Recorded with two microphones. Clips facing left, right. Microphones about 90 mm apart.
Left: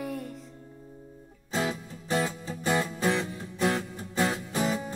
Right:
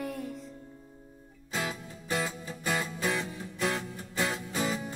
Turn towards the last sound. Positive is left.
turn(degrees=25)  # may be behind; listen again after turning